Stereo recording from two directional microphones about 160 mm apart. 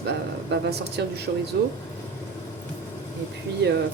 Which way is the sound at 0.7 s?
90° right.